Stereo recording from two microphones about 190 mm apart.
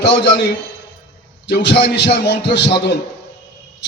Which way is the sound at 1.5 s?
65° left (ahead or behind).